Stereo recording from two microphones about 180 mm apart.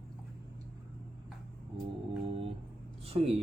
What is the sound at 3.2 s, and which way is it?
Speech, 35° right (ahead or behind).